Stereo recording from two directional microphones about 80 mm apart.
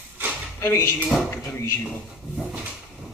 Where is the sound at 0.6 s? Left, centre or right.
Left.